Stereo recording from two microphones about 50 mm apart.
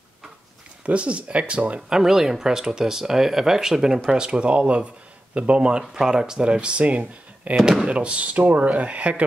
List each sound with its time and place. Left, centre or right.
0.8 s speech: right
1.9 s speech: centre; by 7.5 s right
7.5 s speech: centre; by 9.2 s right